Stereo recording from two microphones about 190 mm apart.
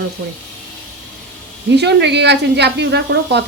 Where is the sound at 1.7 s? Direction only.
60° right (ahead or behind).